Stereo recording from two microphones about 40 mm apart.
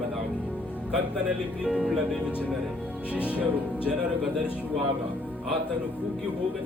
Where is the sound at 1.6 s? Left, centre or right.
Right.